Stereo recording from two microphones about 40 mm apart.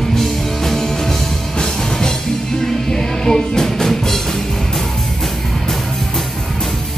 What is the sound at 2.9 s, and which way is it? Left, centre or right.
Music, centre.